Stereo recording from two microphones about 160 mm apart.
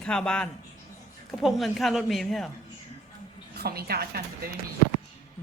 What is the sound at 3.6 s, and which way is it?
Speech, 75° right (ahead or behind).